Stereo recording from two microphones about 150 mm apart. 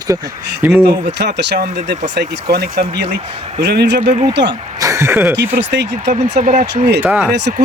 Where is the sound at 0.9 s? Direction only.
90° right.